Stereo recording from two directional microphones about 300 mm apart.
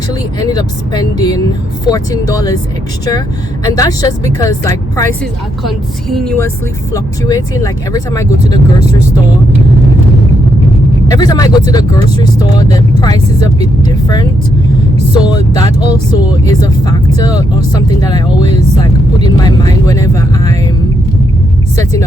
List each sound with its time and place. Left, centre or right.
0.1 s speech: centre
3.7 s a woman's voice: centre
8.4 s speech: right
11.1 s speech: centre